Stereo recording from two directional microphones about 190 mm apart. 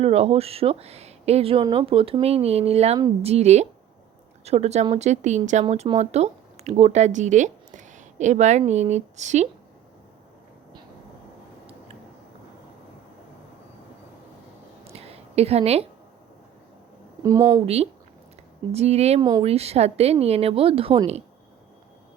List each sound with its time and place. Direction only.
0.0 s speech: 30° right (ahead or behind)
14.8 s a sound: 30° right (ahead or behind)
17.2 s speech: 20° right (ahead or behind)
18.7 s speech: 35° right (ahead or behind)